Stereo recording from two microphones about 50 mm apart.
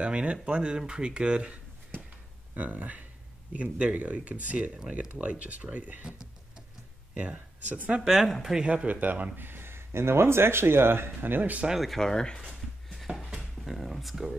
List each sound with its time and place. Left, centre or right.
0.0 s speech: right
7.2 s speech: right
8.1 s speech: centre
8.8 s speech: right
9.5 s speech: right
11.8 s speech: centre
13.1 s a sound: centre
13.7 s speech: centre